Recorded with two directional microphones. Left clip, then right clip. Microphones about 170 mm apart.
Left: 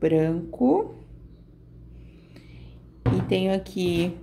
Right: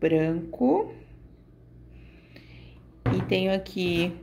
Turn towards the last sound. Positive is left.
turn(degrees=5)  # may be behind; listen again after turning